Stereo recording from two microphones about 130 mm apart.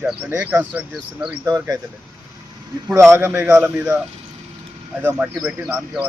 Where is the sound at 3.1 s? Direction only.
15° right (ahead or behind).